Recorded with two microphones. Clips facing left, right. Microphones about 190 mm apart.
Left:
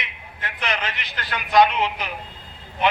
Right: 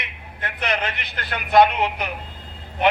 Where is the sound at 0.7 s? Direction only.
55° right (ahead or behind).